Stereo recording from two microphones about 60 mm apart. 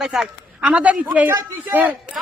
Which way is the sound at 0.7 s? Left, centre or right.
Right.